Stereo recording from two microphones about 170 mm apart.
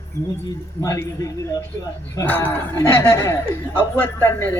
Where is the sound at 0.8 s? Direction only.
20° left (ahead or behind).